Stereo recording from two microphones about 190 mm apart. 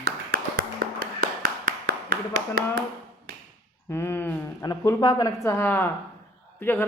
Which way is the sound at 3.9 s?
15° left (ahead or behind).